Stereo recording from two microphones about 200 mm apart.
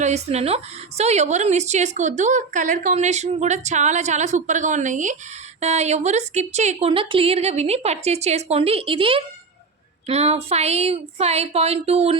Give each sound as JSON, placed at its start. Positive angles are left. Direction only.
{"t": 0.0, "sound": "a woman's voice", "side_deg": -35}